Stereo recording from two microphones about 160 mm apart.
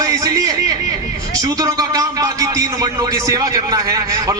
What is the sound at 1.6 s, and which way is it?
A man's voice, 20° right (ahead or behind).